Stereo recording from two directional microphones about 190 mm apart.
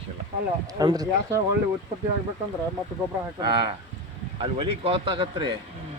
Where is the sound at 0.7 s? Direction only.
20° right (ahead or behind).